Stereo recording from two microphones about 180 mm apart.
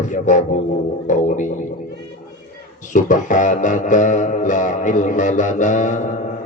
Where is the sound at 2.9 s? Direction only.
45° left (ahead or behind).